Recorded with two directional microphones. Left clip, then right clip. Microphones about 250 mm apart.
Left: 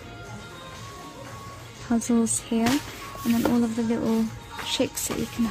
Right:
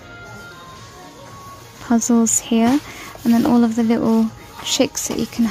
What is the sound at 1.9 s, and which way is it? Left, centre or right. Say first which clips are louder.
Speech: right 8 dB; centre.